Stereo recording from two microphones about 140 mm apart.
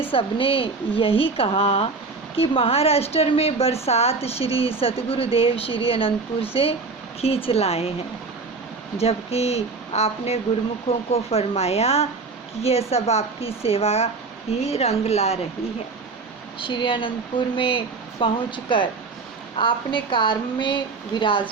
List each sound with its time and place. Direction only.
0.1 s a woman's voice: 40° left (ahead or behind)
9.0 s a woman's voice: 45° left (ahead or behind)
16.6 s speech: 35° left (ahead or behind)